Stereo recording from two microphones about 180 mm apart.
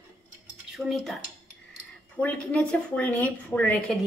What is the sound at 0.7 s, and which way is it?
Dishes, centre (ahead or behind).